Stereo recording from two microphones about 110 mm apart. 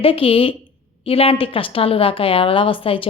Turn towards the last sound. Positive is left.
turn(degrees=55)  # may be behind; listen again after turning